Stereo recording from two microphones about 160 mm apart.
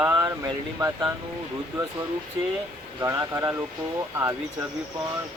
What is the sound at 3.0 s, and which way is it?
Speech, 20° right (ahead or behind).